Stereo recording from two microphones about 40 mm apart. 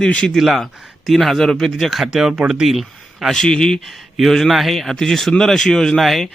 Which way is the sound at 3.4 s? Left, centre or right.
Left.